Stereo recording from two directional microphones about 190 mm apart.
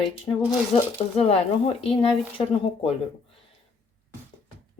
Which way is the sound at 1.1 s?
30° left (ahead or behind).